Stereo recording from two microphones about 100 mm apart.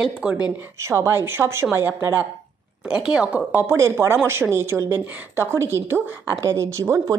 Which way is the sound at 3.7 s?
30° right (ahead or behind).